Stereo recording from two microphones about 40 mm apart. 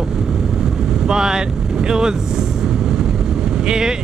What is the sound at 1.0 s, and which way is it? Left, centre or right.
Speech, centre.